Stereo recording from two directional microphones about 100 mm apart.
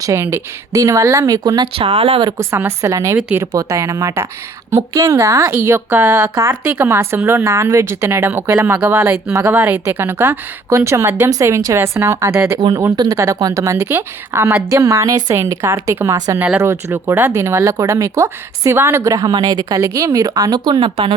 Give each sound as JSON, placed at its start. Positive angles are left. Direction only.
{"t": 0.0, "sound": "speech", "side_deg": -30}
{"t": 1.7, "sound": "speech", "side_deg": -60}
{"t": 2.4, "sound": "a woman's voice", "side_deg": -30}
{"t": 3.2, "sound": "speech", "side_deg": -15}
{"t": 3.4, "sound": "a woman's voice", "side_deg": -30}